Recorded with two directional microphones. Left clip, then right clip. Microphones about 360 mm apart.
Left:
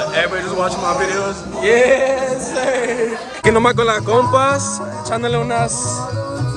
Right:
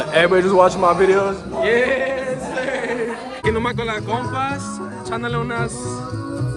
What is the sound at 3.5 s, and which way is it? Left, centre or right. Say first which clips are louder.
Speech: left 8 dB; centre.